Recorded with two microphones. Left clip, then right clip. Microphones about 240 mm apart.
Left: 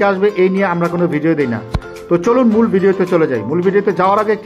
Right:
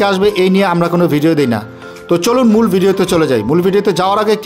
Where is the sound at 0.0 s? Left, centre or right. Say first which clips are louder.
Right 1 dB; right.